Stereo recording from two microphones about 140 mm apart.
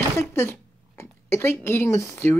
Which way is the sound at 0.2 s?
15° left (ahead or behind).